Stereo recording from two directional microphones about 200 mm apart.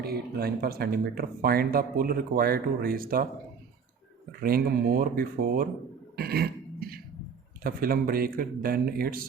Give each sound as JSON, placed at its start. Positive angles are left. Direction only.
{"t": 0.0, "sound": "speech", "side_deg": -50}
{"t": 4.3, "sound": "speech", "side_deg": -50}
{"t": 6.1, "sound": "cough", "side_deg": -50}
{"t": 7.6, "sound": "speech", "side_deg": -45}